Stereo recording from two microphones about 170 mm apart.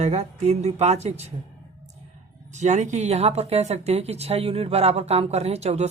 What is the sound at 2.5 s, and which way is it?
Speech, 45° right (ahead or behind).